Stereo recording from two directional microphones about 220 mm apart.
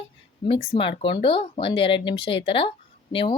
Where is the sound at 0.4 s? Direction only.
25° left (ahead or behind).